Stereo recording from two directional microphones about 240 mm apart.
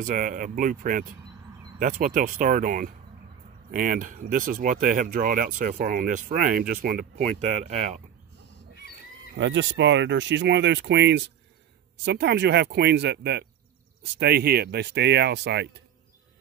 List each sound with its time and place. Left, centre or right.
0.0 s speech: right
7.2 s speech: right
9.4 s speech: right